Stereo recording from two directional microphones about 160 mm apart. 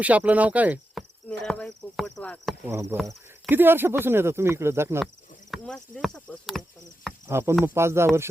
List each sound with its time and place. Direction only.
0.0 s speech: 10° right (ahead or behind)
1.5 s speech: 5° left (ahead or behind)
2.6 s speech: 15° right (ahead or behind)
5.5 s speech: 5° left (ahead or behind)
7.3 s speech: 15° right (ahead or behind)